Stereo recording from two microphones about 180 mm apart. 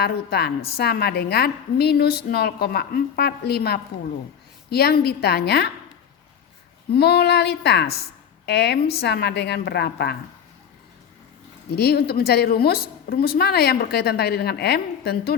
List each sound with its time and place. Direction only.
0.0 s a woman's voice: 60° left (ahead or behind)
6.9 s a woman's voice: 65° left (ahead or behind)
11.7 s a woman's voice: 60° left (ahead or behind)